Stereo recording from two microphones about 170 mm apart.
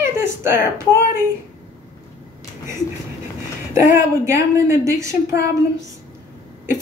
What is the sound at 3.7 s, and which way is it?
A woman's voice, 15° right (ahead or behind).